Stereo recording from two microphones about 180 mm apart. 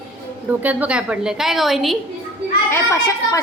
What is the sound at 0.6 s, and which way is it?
A woman's voice, 10° right (ahead or behind).